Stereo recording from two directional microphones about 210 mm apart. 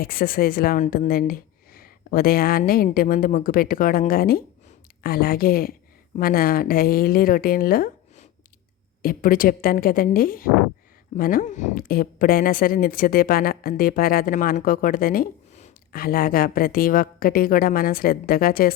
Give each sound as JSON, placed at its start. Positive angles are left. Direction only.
{"t": 0.0, "sound": "a woman's voice", "side_deg": 45}